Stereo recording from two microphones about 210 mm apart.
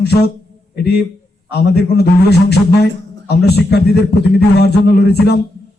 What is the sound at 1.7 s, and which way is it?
A man's voice, 50° left (ahead or behind).